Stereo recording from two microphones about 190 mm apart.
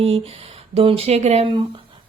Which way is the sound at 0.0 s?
30° right (ahead or behind).